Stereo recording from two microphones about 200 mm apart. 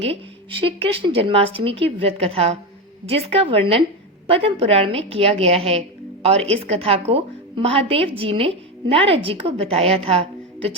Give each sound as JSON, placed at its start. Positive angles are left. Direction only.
{"t": 0.0, "sound": "a woman's voice", "side_deg": -25}